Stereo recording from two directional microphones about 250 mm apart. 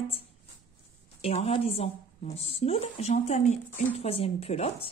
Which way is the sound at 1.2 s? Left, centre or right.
Left.